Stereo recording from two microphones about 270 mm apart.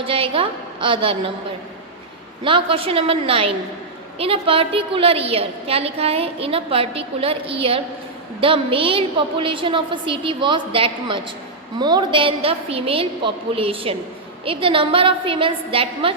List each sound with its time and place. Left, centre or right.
0.0 s a woman's voice: centre
2.4 s a woman's voice: centre